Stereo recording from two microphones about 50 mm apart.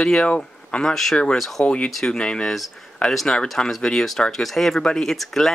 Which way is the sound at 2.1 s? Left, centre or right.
Centre.